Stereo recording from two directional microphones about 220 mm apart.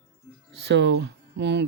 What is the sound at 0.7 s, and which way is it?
Speech, 55° right (ahead or behind).